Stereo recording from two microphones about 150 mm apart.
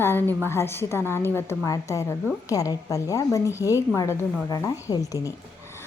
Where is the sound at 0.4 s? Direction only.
15° left (ahead or behind).